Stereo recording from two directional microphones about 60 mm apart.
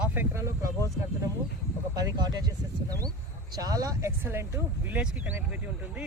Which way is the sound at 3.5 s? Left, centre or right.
Right.